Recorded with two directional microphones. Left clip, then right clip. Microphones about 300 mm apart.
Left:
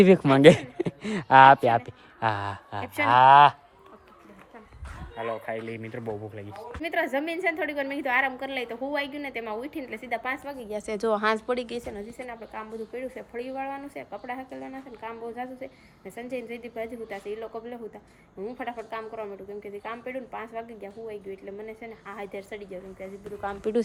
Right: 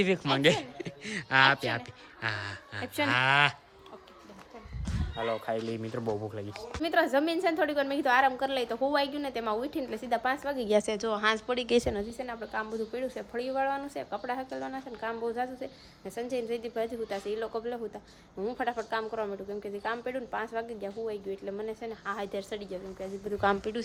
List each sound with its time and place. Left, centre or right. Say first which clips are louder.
0.0 s speech: left 10 dB; centre
2.8 s a woman's voice: left 3 dB; centre
3.1 s speech: left 10 dB; centre
5.1 s a woman's voice: even; centre
10.6 s speech: right 8 dB; right
10.8 s speech: left 3 dB; centre
11.6 s a woman's voice: right 7 dB; centre
23.6 s speech: left 9 dB; centre